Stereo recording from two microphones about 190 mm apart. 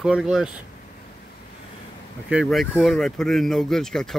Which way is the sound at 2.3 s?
Centre (ahead or behind).